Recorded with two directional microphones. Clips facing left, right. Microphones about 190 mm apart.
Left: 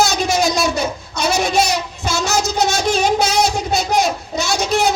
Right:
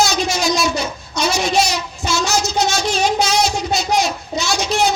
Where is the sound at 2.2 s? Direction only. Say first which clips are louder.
Left 2 dB; 55° left (ahead or behind).